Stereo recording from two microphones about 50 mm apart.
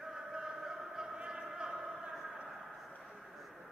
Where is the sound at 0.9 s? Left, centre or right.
Centre.